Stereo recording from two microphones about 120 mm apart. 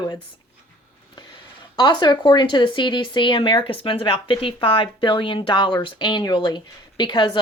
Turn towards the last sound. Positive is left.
turn(degrees=40)  # may be behind; listen again after turning